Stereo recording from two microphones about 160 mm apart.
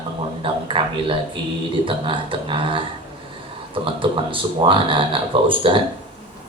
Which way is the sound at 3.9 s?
35° right (ahead or behind).